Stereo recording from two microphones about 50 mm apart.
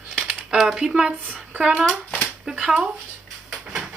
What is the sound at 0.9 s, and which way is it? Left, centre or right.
Speech, centre.